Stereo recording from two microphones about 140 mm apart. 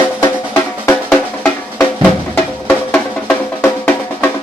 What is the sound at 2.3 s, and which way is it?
Music, 10° left (ahead or behind).